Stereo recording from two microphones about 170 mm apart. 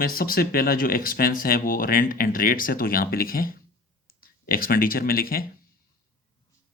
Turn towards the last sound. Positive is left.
turn(degrees=60)  # may be behind; listen again after turning